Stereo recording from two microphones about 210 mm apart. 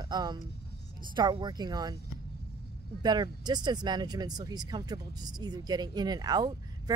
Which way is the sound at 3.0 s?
20° right (ahead or behind).